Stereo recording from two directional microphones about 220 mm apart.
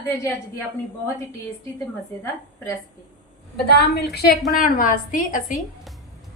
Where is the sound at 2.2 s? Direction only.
10° left (ahead or behind).